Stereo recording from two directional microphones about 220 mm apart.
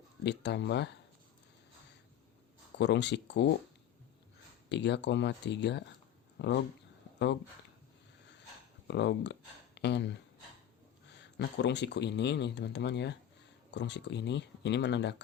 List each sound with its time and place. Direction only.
0.3 s speech: 50° left (ahead or behind)
2.7 s speech: 50° left (ahead or behind)
4.7 s speech: 50° left (ahead or behind)
8.9 s speech: 55° left (ahead or behind)
11.2 s speech: 50° left (ahead or behind)